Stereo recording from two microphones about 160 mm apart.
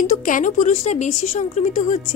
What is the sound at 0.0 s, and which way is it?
Speech, 55° left (ahead or behind).